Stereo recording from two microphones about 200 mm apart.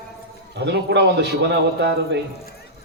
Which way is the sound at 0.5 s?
60° right (ahead or behind).